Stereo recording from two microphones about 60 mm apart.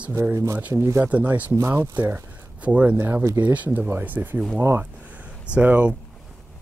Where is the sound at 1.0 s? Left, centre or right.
Right.